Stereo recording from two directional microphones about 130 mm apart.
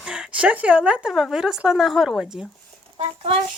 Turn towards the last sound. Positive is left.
turn(degrees=-50)  # may be behind; listen again after turning